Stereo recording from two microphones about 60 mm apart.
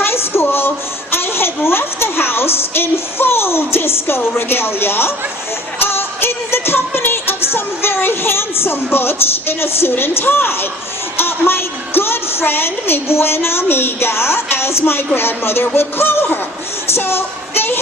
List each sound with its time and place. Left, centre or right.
0.0 s a sound: left
5.8 s music: left
9.9 s a woman's voice: left